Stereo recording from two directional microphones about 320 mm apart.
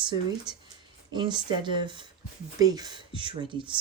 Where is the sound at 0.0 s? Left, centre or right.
Centre.